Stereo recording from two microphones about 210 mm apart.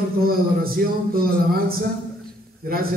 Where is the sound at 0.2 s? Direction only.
45° right (ahead or behind).